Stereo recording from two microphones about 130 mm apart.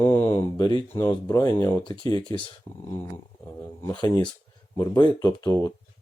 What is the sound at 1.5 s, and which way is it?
Speech, 35° left (ahead or behind).